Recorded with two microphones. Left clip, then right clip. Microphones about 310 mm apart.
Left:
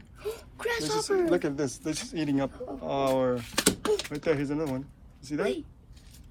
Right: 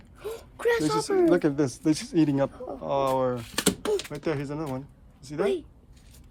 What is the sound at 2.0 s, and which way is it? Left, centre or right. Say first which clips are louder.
Speech: right 4 dB; right.